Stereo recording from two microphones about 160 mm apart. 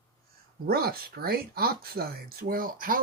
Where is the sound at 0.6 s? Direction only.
75° right (ahead or behind).